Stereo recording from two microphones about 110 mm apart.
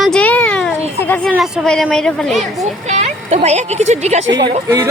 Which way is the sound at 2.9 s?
85° right.